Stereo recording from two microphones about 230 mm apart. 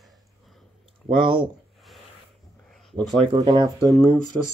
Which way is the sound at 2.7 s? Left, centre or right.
Centre.